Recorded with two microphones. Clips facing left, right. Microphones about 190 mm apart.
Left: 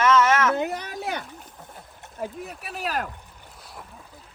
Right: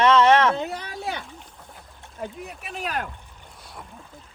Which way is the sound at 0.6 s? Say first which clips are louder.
Left 2 dB; 20° left (ahead or behind).